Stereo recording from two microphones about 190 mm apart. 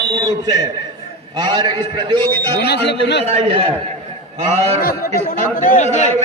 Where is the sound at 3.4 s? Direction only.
30° right (ahead or behind).